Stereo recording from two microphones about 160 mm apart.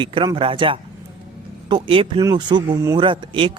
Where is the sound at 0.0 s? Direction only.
30° right (ahead or behind).